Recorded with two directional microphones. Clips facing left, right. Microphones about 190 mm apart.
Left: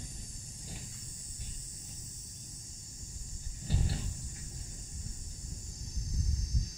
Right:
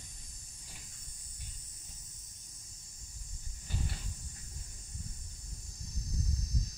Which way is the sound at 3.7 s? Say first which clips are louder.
Left 5 dB; 35° left (ahead or behind).